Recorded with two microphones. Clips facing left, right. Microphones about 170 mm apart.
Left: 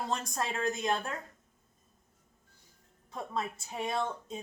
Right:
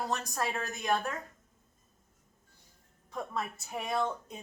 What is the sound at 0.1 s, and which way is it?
A woman's voice, 25° left (ahead or behind).